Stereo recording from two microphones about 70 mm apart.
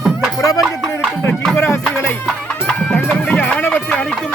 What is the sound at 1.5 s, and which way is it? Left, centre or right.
Music, left.